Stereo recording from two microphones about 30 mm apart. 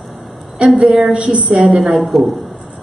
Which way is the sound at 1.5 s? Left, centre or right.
Right.